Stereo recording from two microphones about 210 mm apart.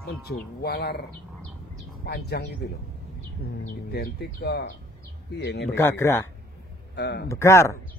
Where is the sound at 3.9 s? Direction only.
50° left (ahead or behind).